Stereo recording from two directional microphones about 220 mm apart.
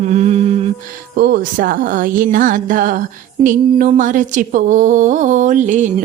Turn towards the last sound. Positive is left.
turn(degrees=-35)  # may be behind; listen again after turning